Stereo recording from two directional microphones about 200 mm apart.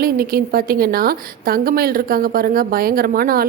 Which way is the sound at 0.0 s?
50° right (ahead or behind).